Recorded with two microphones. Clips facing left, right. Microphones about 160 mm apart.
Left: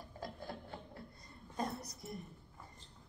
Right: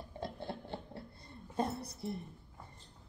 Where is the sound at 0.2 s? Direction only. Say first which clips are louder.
Right 4 dB; 30° right (ahead or behind).